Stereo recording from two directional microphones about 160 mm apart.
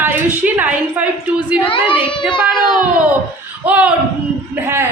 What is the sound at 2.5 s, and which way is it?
Speech, 25° left (ahead or behind).